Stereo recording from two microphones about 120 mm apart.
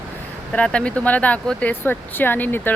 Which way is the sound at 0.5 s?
10° left (ahead or behind).